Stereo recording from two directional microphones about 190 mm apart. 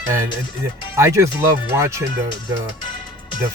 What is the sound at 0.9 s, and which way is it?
Speech, 15° right (ahead or behind).